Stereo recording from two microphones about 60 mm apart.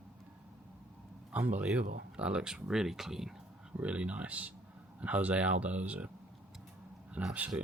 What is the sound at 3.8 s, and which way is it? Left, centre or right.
Speech, right.